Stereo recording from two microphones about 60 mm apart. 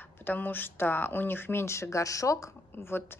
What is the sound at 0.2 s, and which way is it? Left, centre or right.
Speech, left.